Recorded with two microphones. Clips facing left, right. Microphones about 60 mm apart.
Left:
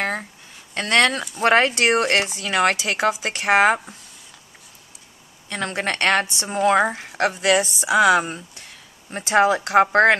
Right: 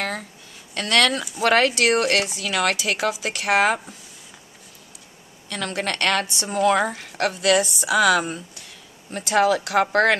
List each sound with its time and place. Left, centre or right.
0.0 s a sound: left
0.7 s a woman's voice: left
5.5 s a woman's voice: left